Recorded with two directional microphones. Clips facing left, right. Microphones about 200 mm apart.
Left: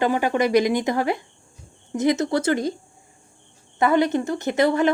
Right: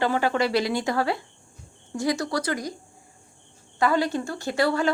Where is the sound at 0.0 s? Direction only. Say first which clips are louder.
Left 3 dB; 15° left (ahead or behind).